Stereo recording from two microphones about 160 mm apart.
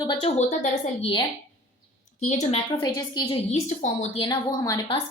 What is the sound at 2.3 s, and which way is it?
Speech, 50° left (ahead or behind).